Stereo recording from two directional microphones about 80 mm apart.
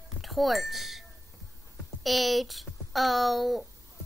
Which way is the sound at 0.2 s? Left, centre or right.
Centre.